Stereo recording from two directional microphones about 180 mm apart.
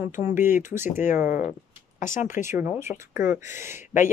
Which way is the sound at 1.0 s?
45° left (ahead or behind).